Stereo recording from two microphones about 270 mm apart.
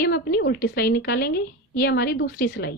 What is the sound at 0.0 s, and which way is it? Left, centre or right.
A woman's voice, left.